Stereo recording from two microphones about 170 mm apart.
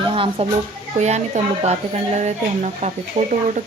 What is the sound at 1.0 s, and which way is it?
A woman's voice, 45° right (ahead or behind).